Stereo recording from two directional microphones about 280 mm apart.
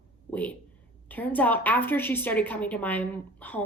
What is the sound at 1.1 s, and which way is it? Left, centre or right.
A woman's voice, centre.